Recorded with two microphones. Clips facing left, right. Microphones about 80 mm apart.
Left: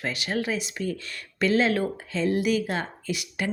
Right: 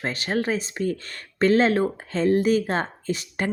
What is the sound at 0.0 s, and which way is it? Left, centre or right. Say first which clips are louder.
Speech: right 3 dB; right.